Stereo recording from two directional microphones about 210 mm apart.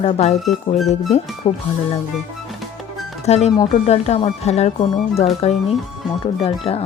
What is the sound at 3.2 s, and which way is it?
Speech, 30° left (ahead or behind).